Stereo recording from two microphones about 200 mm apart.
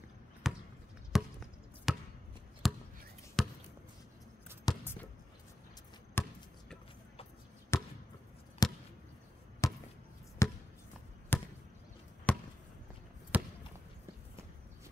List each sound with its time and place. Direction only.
0.4 s basketball bounce: centre (ahead or behind)
4.7 s a sound: 20° left (ahead or behind)
6.2 s basketball bounce: 10° left (ahead or behind)
7.7 s basketball bounce: 15° left (ahead or behind)
13.3 s basketball bounce: 5° right (ahead or behind)